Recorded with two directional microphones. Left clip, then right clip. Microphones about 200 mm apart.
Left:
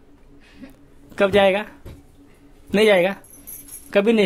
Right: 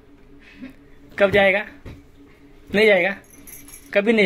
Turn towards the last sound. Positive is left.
turn(degrees=40)  # may be behind; listen again after turning